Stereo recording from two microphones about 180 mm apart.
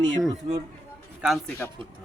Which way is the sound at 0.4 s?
35° right (ahead or behind).